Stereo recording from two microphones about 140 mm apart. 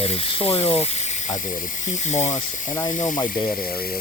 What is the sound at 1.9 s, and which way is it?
Speech, 55° left (ahead or behind).